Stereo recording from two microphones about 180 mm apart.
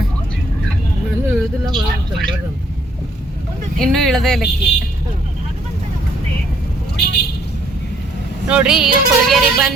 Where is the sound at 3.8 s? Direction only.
Centre (ahead or behind).